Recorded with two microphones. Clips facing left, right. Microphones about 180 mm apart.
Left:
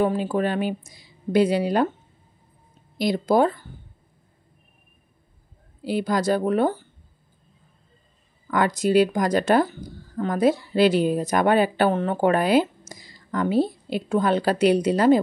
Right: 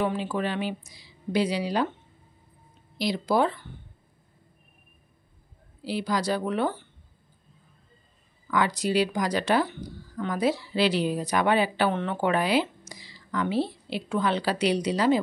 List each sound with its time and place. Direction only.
0.0 s a woman's voice: 45° left (ahead or behind)
3.0 s a woman's voice: 50° left (ahead or behind)
5.9 s a woman's voice: 50° left (ahead or behind)
8.5 s a woman's voice: 50° left (ahead or behind)